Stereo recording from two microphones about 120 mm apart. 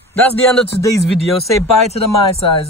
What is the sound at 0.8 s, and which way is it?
Speech, 25° left (ahead or behind).